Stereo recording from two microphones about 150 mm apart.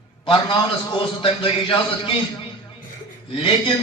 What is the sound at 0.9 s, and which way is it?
Speech, 35° left (ahead or behind).